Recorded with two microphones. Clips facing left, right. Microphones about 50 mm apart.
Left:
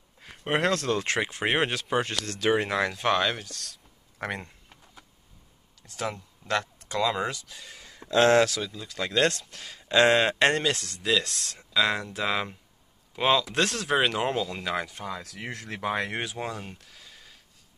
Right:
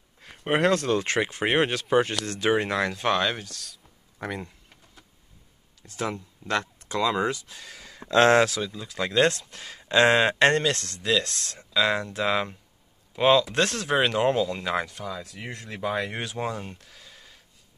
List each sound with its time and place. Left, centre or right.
0.2 s speech: centre
2.2 s speech: right
2.5 s speech: centre
4.4 s a sound: centre
5.8 s speech: centre
8.0 s a sound: right
8.4 s speech: centre
15.0 s speech: left
15.2 s speech: left
15.9 s speech: left
16.3 s a sound: centre